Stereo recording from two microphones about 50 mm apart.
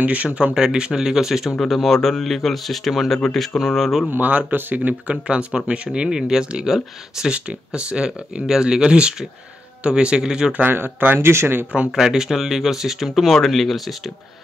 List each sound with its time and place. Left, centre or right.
0.0 s speech: right
0.6 s speech: centre
1.6 s speech: centre
4.1 s speech: right; by 7.3 s centre
7.3 s speech: right
10.6 s speech: right
11.1 s speech: right
11.9 s speech: centre